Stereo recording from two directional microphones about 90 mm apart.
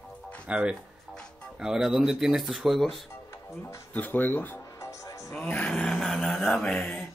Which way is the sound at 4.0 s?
20° left (ahead or behind).